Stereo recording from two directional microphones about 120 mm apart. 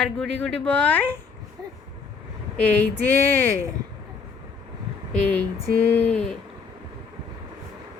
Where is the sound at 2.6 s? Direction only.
15° left (ahead or behind).